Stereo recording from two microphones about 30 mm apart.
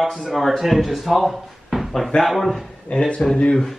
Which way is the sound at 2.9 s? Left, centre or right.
Left.